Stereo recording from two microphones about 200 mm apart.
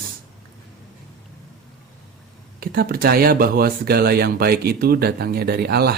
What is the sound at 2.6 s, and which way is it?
Speech, 50° right (ahead or behind).